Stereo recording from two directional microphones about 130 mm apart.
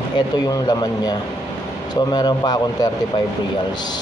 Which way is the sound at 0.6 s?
30° left (ahead or behind).